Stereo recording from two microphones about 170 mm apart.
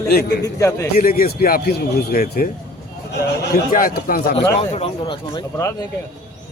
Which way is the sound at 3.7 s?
55° left (ahead or behind).